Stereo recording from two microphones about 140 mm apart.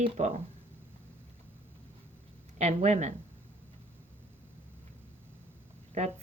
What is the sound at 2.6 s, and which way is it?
Speech, 55° right (ahead or behind).